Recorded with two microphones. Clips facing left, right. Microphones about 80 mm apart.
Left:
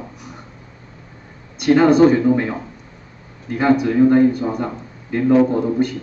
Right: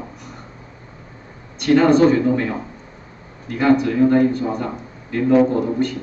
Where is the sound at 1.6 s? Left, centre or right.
Centre.